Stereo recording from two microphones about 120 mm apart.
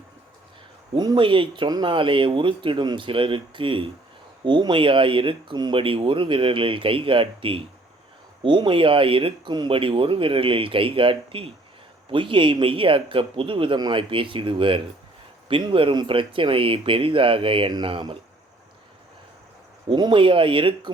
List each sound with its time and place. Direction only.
0.9 s speech: 40° right (ahead or behind)
19.9 s speech: 40° right (ahead or behind)